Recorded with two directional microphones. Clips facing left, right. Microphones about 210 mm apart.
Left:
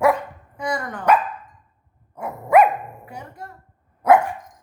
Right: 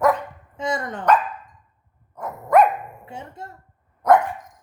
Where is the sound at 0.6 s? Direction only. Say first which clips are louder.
Right 1 dB; 25° right (ahead or behind).